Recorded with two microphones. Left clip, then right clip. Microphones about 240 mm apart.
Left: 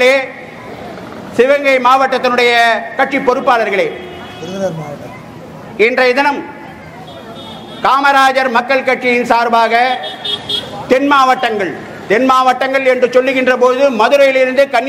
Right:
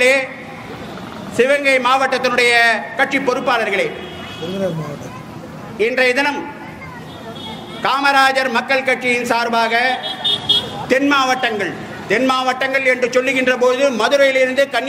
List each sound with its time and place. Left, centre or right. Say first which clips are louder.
0.0 s a sound: left 3 dB; left
1.3 s a man's voice: left 4 dB; centre
5.8 s a man's voice: left 5 dB; left
7.8 s a man's voice: left 4 dB; left